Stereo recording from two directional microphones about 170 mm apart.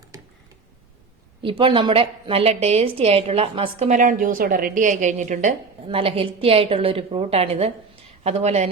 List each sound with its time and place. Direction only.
1.4 s a woman's voice: 30° right (ahead or behind); by 5.5 s 45° right (ahead or behind)
5.9 s a woman's voice: 35° right (ahead or behind)